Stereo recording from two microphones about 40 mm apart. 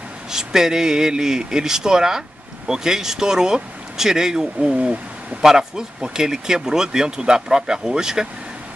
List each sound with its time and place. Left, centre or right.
0.3 s speech: centre